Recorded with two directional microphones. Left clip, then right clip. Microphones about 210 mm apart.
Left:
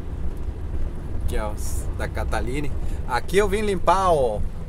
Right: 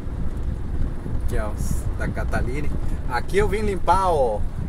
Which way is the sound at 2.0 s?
20° left (ahead or behind).